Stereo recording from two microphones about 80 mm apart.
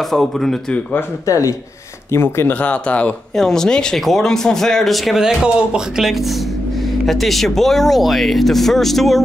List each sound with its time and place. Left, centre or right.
0.1 s speech: centre
1.2 s a man's voice: left
2.6 s a man's voice: centre